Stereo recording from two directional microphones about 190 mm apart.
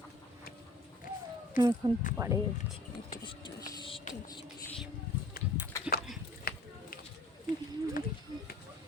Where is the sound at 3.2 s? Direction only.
25° left (ahead or behind).